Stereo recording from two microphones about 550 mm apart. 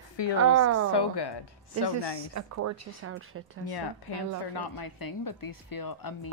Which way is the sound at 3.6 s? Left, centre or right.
Left.